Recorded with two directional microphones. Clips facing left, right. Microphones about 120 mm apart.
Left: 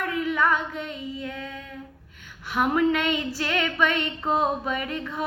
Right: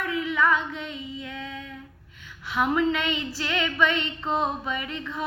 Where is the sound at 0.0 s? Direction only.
45° left (ahead or behind).